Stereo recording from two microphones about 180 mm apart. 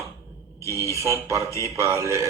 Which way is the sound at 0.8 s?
15° left (ahead or behind).